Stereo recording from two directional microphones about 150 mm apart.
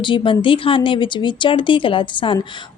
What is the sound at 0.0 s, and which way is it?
Speech, 35° left (ahead or behind).